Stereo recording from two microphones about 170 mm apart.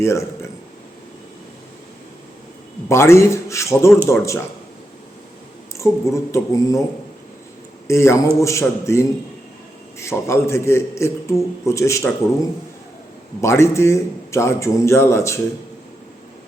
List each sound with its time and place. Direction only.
0.0 s a man's voice: 15° left (ahead or behind)
2.9 s a man's voice: 15° left (ahead or behind)
5.7 s a man's voice: 15° left (ahead or behind)
7.9 s a man's voice: 15° left (ahead or behind)